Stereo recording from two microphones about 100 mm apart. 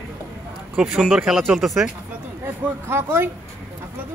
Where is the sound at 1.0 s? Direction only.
5° right (ahead or behind).